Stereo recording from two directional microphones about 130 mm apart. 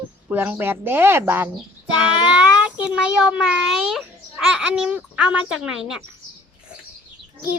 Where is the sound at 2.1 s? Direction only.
10° right (ahead or behind).